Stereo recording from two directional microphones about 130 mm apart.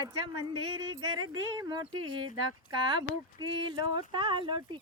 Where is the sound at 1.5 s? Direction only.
30° right (ahead or behind).